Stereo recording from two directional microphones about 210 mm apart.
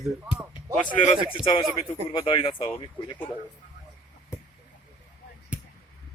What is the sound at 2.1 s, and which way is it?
Speech, 25° left (ahead or behind).